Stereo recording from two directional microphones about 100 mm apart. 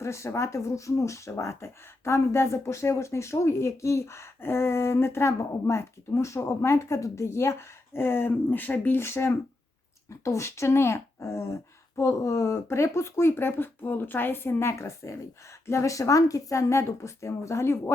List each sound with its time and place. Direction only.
0.0 s speech: 30° left (ahead or behind)